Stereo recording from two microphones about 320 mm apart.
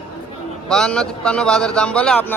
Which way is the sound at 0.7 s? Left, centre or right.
Centre.